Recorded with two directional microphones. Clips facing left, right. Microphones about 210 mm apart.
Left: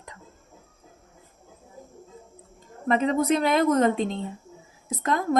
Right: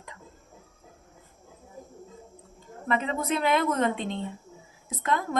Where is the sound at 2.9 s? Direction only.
40° left (ahead or behind).